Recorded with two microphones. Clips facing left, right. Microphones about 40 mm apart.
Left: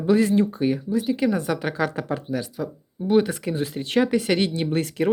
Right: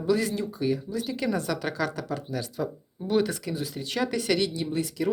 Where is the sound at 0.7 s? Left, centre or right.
Left.